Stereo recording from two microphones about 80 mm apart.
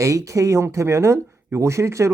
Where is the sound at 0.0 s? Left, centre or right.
Right.